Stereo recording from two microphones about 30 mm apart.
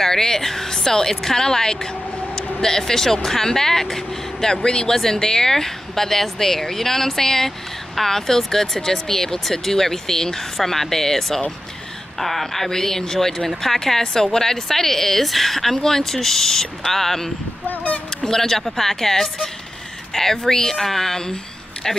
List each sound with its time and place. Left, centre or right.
0.0 s speech: centre
4.9 s speech: centre